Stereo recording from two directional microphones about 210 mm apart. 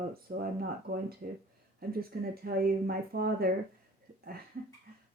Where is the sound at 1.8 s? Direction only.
45° right (ahead or behind).